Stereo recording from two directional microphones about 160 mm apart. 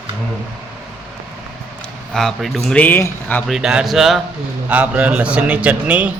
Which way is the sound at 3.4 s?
Centre (ahead or behind).